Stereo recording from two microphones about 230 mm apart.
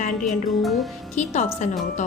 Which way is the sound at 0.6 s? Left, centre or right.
Centre.